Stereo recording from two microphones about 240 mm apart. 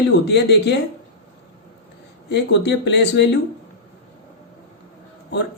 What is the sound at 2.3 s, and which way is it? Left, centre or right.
Speech, left.